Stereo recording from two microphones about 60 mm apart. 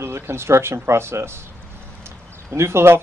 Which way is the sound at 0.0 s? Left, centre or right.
Right.